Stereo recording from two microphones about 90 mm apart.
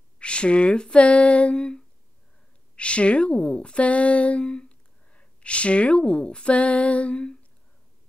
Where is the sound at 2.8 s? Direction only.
15° left (ahead or behind).